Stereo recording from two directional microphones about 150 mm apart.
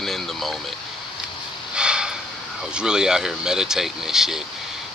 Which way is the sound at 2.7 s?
5° right (ahead or behind).